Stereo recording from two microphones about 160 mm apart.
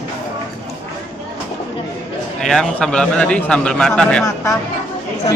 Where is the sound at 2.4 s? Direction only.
5° left (ahead or behind).